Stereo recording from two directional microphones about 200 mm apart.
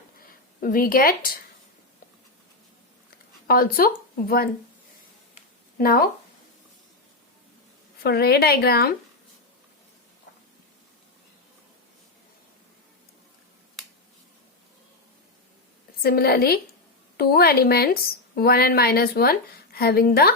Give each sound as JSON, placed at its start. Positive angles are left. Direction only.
{"t": 0.6, "sound": "a woman's voice", "side_deg": 45}
{"t": 3.4, "sound": "speech", "side_deg": 50}
{"t": 5.7, "sound": "speech", "side_deg": 45}
{"t": 8.0, "sound": "a woman's voice", "side_deg": 50}
{"t": 16.0, "sound": "a woman's voice", "side_deg": 50}